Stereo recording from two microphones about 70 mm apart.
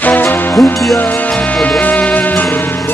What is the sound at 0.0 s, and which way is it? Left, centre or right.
Music, left.